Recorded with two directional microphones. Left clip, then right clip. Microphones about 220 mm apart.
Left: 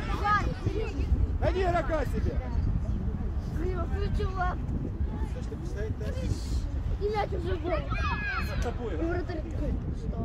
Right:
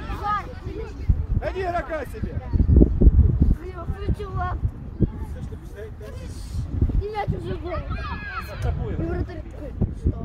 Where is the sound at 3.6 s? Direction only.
50° right (ahead or behind).